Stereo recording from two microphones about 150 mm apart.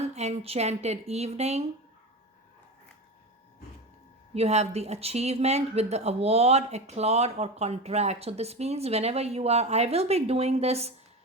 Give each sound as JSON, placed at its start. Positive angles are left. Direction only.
{"t": 0.0, "sound": "speech", "side_deg": -45}
{"t": 4.4, "sound": "speech", "side_deg": -45}